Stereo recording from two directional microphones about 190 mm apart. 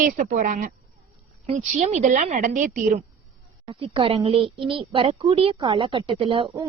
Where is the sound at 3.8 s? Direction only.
30° right (ahead or behind).